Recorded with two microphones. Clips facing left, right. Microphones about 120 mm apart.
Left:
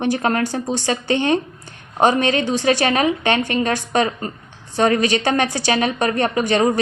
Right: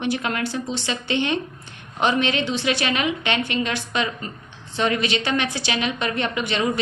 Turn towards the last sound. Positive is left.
turn(degrees=40)  # may be behind; listen again after turning